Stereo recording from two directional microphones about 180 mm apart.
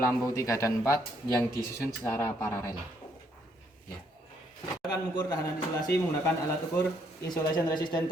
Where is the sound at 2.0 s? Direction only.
10° left (ahead or behind).